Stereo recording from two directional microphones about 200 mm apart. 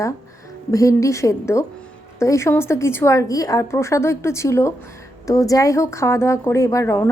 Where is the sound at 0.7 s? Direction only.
15° left (ahead or behind).